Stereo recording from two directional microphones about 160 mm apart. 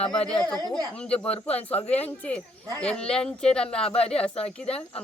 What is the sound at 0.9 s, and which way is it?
Speech, 5° left (ahead or behind).